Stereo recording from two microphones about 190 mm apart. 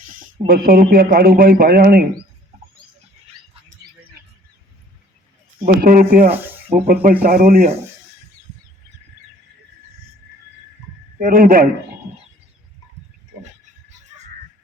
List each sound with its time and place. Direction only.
0.1 s speech: 45° right (ahead or behind)
5.5 s speech: 50° right (ahead or behind)
6.3 s speech: 10° right (ahead or behind)
6.7 s speech: 50° right (ahead or behind)
11.2 s speech: 45° right (ahead or behind)